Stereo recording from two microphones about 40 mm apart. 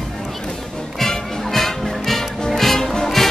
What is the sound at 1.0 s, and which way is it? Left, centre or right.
Music, centre.